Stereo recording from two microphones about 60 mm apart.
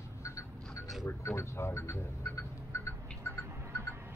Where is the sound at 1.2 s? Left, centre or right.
Left.